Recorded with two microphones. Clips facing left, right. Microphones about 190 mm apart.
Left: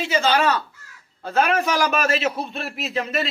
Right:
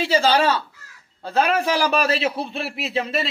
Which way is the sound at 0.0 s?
30° right (ahead or behind).